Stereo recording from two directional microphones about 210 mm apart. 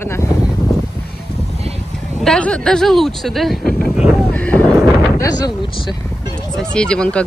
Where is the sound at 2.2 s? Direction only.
5° left (ahead or behind); by 5.9 s 20° left (ahead or behind).